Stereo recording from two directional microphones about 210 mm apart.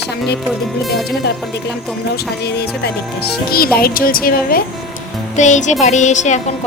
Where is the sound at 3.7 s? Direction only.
45° left (ahead or behind).